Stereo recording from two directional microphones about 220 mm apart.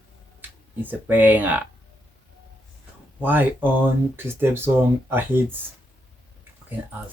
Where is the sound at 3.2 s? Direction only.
10° right (ahead or behind).